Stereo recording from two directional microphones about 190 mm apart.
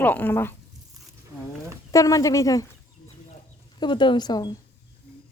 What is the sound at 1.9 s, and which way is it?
Speech, 15° left (ahead or behind).